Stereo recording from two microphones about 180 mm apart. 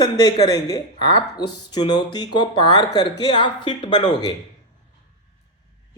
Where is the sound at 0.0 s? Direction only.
25° left (ahead or behind).